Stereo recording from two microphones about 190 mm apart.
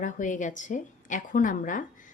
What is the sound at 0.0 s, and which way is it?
A woman's voice, 40° left (ahead or behind).